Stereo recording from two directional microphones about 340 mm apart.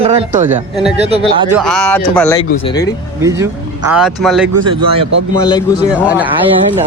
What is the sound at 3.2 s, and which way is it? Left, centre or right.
Speech, centre.